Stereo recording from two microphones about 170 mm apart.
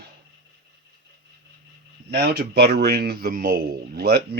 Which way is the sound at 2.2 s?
75° right (ahead or behind).